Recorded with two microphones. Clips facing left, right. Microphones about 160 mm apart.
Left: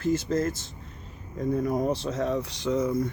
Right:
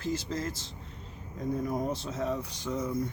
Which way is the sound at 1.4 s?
65° left (ahead or behind).